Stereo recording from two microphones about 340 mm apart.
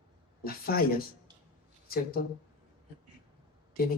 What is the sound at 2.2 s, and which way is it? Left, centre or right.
Speech, left.